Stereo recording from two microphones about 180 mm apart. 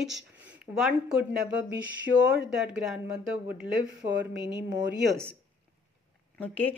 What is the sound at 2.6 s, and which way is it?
Speech, 5° right (ahead or behind).